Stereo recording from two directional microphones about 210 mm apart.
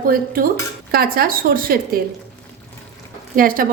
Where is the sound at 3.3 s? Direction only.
40° right (ahead or behind).